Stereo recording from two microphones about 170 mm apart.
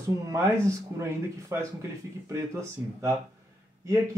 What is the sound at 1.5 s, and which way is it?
Speech, 15° right (ahead or behind).